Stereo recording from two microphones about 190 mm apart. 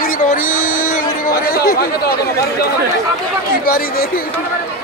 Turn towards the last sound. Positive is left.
turn(degrees=50)  # may be behind; listen again after turning